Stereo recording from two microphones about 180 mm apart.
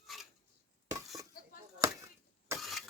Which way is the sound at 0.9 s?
20° right (ahead or behind).